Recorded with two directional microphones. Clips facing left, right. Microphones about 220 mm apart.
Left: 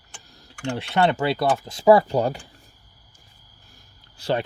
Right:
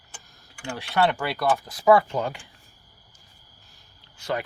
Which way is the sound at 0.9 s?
25° left (ahead or behind).